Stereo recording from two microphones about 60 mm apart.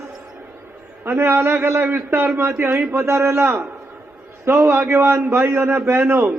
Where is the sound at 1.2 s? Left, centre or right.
Right.